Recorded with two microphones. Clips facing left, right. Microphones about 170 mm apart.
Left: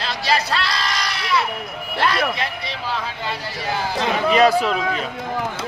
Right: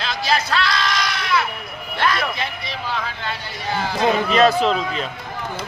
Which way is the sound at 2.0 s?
35° left (ahead or behind).